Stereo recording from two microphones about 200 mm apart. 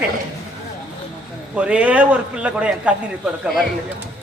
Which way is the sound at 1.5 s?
5° right (ahead or behind).